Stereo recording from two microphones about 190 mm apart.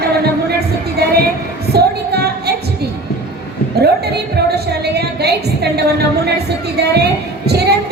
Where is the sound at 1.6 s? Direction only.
55° right (ahead or behind).